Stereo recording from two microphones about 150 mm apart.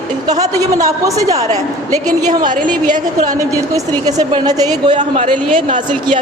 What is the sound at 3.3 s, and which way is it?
A woman's voice, 20° right (ahead or behind).